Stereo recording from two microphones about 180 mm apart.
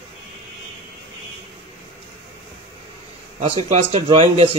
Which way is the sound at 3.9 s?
25° right (ahead or behind).